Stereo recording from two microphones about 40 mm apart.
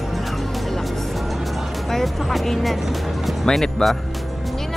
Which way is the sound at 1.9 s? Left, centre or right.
Centre.